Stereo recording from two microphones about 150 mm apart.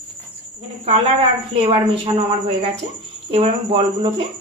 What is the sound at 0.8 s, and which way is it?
A woman's voice, 40° right (ahead or behind).